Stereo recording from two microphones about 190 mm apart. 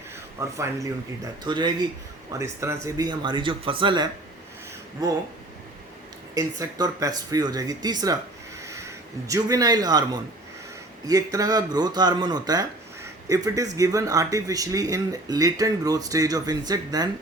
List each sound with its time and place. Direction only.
0.3 s speech: 15° right (ahead or behind)
6.3 s speech: 20° right (ahead or behind)